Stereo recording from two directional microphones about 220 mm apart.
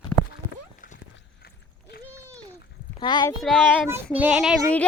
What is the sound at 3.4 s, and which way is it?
Child singing, 5° left (ahead or behind).